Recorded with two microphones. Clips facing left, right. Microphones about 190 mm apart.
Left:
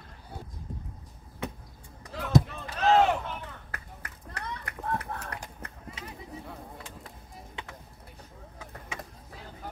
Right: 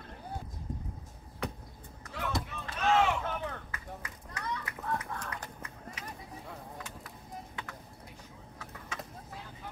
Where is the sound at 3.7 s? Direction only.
65° left (ahead or behind).